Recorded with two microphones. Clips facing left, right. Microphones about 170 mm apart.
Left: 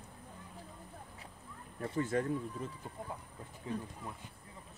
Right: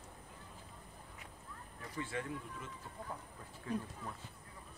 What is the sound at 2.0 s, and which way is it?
Speech, 40° left (ahead or behind).